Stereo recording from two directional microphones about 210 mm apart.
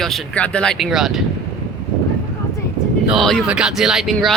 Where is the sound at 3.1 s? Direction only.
Centre (ahead or behind).